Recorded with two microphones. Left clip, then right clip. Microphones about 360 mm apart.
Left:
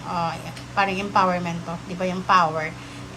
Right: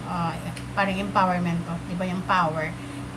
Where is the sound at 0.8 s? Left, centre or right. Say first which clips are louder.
Left 3 dB; centre.